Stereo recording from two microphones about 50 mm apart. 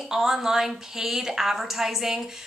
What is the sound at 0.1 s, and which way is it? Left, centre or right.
A woman's voice, centre.